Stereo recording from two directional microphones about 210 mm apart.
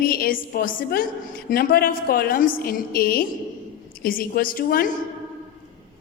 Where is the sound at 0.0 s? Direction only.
45° left (ahead or behind).